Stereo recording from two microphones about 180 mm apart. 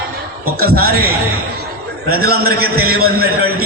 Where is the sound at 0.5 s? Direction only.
55° right (ahead or behind).